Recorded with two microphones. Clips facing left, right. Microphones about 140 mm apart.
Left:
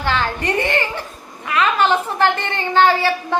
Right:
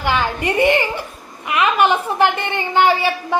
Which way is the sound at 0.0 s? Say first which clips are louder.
Right 1 dB; 15° right (ahead or behind).